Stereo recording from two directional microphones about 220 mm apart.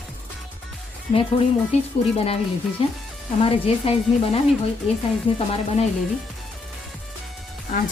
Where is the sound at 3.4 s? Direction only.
25° left (ahead or behind).